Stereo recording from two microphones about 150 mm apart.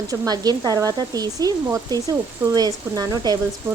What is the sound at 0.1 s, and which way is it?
A woman's voice, 25° right (ahead or behind).